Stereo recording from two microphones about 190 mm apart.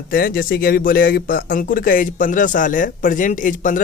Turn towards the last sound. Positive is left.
turn(degrees=45)  # may be behind; listen again after turning